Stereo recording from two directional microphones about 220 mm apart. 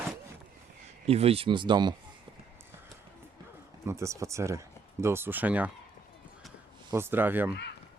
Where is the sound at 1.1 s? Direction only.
25° right (ahead or behind).